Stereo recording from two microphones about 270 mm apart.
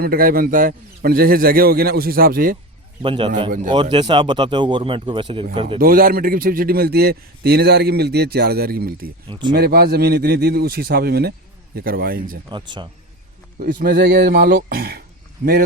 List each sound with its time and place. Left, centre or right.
0.0 s a man's voice: right
3.0 s speech: centre
5.8 s a man's voice: right
12.5 s speech: centre
13.6 s a man's voice: right